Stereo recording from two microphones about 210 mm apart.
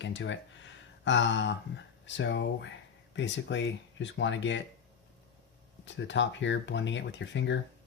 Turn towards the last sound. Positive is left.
turn(degrees=60)  # may be behind; listen again after turning